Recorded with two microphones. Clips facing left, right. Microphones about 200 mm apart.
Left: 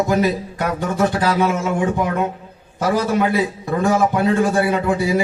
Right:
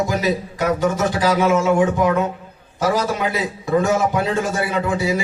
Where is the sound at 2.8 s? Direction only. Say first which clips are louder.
Left 2 dB; 55° left (ahead or behind).